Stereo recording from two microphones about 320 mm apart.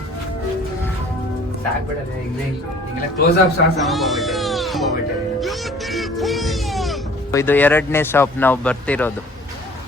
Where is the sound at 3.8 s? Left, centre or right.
Centre.